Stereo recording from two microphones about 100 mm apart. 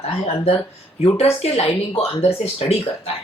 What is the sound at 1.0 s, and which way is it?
Speech, 90° left.